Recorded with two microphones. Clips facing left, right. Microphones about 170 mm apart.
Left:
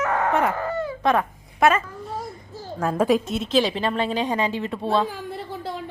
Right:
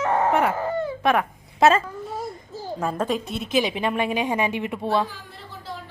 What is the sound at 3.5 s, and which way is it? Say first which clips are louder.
Speech: left 1 dB; 10° right (ahead or behind).